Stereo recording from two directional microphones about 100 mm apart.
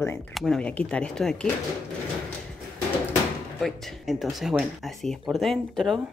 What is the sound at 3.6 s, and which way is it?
Speech, centre (ahead or behind).